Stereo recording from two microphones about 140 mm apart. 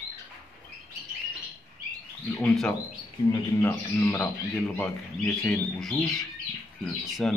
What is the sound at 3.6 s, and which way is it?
Speech, 15° left (ahead or behind).